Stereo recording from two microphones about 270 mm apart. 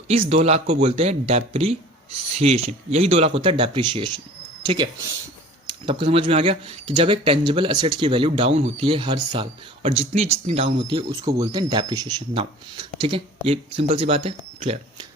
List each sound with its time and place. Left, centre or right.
0.1 s speech: right